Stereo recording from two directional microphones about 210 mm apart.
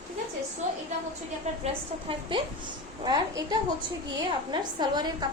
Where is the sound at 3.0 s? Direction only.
20° right (ahead or behind).